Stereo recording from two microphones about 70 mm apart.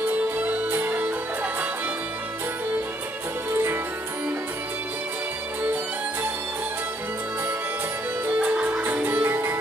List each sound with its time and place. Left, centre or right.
0.5 s music: right
8.3 s music: centre